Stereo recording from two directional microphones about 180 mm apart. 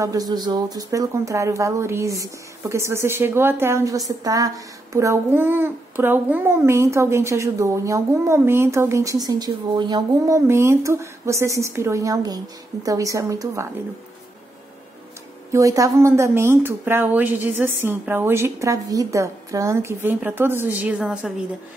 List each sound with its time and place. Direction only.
0.0 s speech: 20° right (ahead or behind)
15.5 s speech: 20° right (ahead or behind)